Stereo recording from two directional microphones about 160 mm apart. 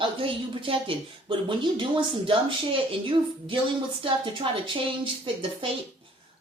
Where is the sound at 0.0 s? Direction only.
30° right (ahead or behind).